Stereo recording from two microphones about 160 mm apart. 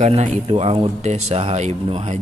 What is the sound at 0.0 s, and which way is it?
Speech, 45° right (ahead or behind).